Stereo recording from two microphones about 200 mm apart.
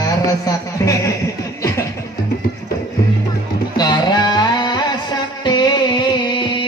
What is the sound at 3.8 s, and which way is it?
Music, 20° left (ahead or behind).